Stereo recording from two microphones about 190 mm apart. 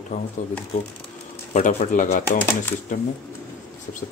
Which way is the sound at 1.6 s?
40° left (ahead or behind).